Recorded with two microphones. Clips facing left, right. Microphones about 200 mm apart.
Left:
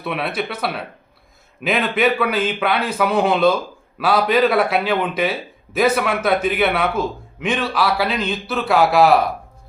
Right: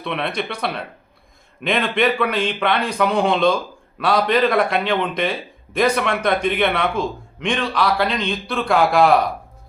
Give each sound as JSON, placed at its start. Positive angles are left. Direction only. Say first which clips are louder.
{"t": 0.0, "sound": "a man's voice", "louder": "left 1 dB", "side_deg": 5}